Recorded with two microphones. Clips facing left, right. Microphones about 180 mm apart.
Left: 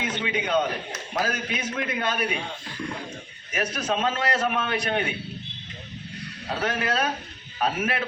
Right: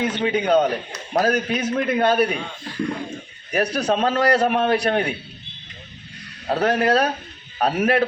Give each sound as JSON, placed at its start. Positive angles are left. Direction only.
{"t": 0.0, "sound": "a man's voice", "side_deg": -40}
{"t": 3.5, "sound": "a man's voice", "side_deg": -35}
{"t": 6.5, "sound": "a man's voice", "side_deg": -40}